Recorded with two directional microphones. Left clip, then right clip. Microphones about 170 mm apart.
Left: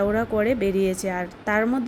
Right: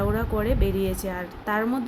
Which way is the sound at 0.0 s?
15° left (ahead or behind).